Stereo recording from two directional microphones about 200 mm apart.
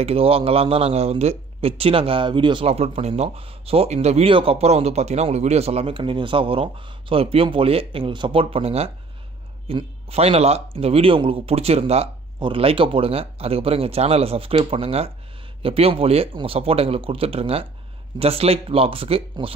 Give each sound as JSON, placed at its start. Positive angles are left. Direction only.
{"t": 0.0, "sound": "speech", "side_deg": -30}